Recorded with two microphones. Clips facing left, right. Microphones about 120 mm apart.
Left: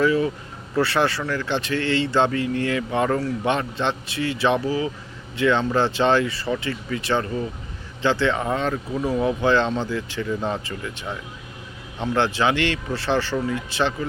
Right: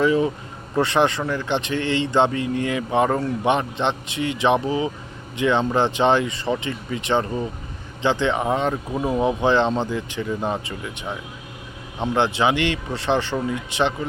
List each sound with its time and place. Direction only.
0.0 s speech: 25° right (ahead or behind)